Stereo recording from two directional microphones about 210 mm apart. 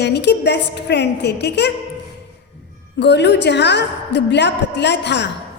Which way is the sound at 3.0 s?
55° left (ahead or behind).